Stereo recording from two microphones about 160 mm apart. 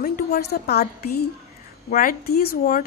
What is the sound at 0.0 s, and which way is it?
A woman's voice, 65° left (ahead or behind).